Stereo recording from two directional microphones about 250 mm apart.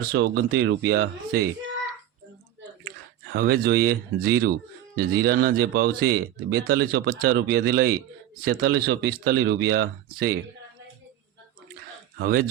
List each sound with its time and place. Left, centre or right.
0.0 s speech: right
2.8 s speech: right
12.2 s speech: right